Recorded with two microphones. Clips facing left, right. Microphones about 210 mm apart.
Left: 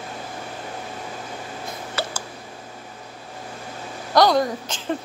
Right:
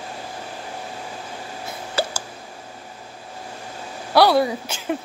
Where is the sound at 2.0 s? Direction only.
30° right (ahead or behind).